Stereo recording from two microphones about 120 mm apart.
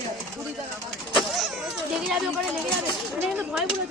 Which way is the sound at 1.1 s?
Centre (ahead or behind).